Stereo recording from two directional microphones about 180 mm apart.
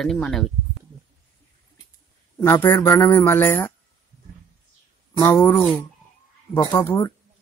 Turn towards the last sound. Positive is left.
turn(degrees=15)  # may be behind; listen again after turning